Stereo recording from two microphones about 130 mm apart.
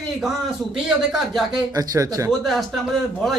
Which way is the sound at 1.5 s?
30° right (ahead or behind).